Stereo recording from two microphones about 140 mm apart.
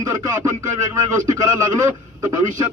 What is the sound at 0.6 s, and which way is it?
A man's voice, 25° right (ahead or behind).